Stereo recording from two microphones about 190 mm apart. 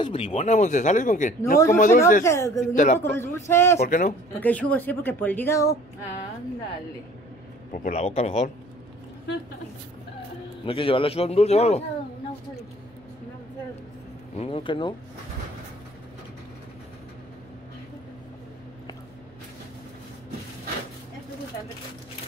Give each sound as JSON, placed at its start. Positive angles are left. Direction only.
{"t": 0.0, "sound": "speech", "side_deg": 30}
{"t": 2.2, "sound": "speech", "side_deg": 15}
{"t": 2.7, "sound": "speech", "side_deg": 40}
{"t": 3.0, "sound": "speech", "side_deg": 15}
{"t": 3.8, "sound": "speech", "side_deg": 45}
{"t": 4.4, "sound": "speech", "side_deg": 10}
{"t": 7.7, "sound": "speech", "side_deg": 40}
{"t": 10.6, "sound": "speech", "side_deg": 30}
{"t": 14.3, "sound": "speech", "side_deg": 30}